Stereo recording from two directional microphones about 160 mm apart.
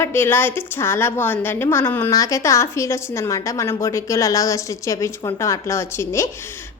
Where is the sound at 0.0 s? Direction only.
15° left (ahead or behind).